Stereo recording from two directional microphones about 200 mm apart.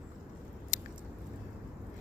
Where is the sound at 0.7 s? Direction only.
40° left (ahead or behind).